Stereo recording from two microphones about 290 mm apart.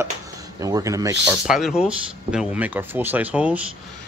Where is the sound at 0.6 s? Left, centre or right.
Centre.